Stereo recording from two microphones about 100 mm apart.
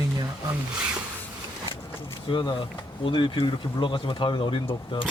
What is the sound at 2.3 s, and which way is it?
Speech, 55° left (ahead or behind).